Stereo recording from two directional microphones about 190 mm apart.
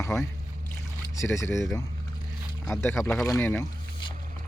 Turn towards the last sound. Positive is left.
turn(degrees=10)  # may be behind; listen again after turning